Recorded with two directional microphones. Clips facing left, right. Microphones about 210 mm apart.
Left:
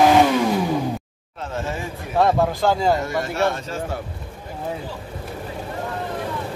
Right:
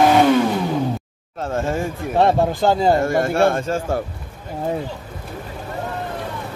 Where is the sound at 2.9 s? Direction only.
50° right (ahead or behind).